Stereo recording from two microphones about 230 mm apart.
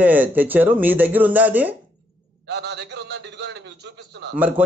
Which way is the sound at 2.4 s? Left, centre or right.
Right.